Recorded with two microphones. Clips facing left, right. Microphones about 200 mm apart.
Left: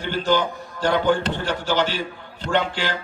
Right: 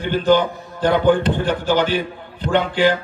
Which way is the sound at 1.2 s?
55° right (ahead or behind).